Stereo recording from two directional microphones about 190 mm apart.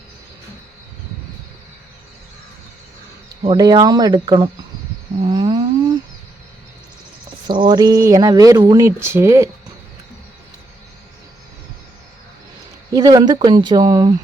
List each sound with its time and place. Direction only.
3.4 s speech: 25° right (ahead or behind)
5.2 s a sound: 20° right (ahead or behind)
7.4 s speech: 25° right (ahead or behind)
12.9 s speech: 20° right (ahead or behind)